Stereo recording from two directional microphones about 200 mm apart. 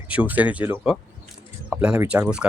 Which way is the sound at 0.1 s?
5° right (ahead or behind).